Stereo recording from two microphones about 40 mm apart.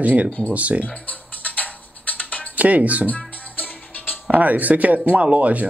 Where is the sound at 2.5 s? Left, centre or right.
Right.